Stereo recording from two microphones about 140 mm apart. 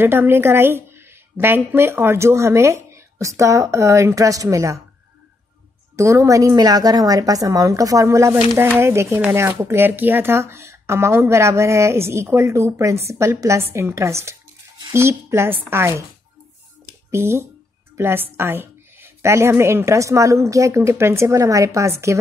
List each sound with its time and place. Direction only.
0.0 s a woman's voice: 15° right (ahead or behind)
5.9 s a woman's voice: 20° right (ahead or behind)
17.1 s a woman's voice: 20° right (ahead or behind)